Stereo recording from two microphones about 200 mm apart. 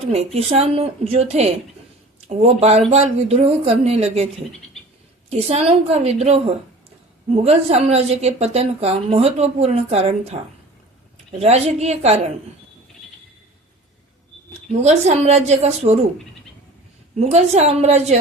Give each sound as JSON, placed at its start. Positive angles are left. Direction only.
{"t": 0.3, "sound": "a woman's voice", "side_deg": -30}
{"t": 5.3, "sound": "a woman's voice", "side_deg": -30}
{"t": 14.7, "sound": "a woman's voice", "side_deg": -35}
{"t": 17.2, "sound": "a woman's voice", "side_deg": -35}